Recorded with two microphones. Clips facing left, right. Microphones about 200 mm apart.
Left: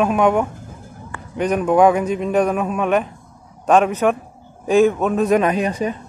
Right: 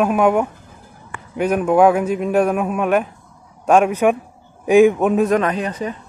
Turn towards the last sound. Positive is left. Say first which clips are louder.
# left 3 dB
turn(degrees=15)  # may be behind; listen again after turning